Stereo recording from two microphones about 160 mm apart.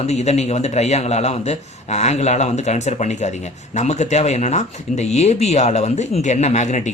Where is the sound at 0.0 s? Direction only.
45° left (ahead or behind).